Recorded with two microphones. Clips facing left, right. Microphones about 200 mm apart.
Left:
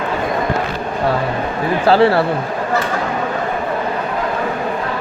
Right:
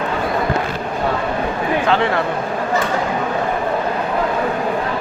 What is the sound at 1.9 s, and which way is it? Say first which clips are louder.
Speech: left 8 dB; 35° left (ahead or behind).